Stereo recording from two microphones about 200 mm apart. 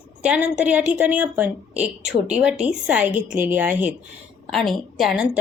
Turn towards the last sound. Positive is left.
turn(degrees=-5)  # may be behind; listen again after turning